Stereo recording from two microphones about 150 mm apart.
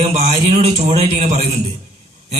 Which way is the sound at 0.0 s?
50° right (ahead or behind).